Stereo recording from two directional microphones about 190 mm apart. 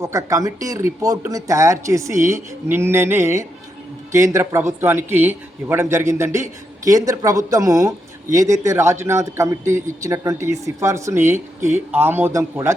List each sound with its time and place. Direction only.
0.0 s a man's voice: 15° right (ahead or behind)